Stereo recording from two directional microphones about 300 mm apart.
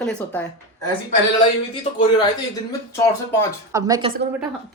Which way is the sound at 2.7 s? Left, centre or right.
Centre.